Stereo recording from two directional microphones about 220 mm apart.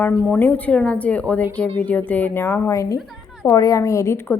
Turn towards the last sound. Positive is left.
turn(degrees=10)  # may be behind; listen again after turning